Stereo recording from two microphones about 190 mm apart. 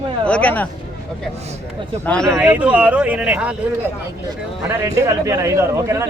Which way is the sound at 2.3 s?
10° right (ahead or behind).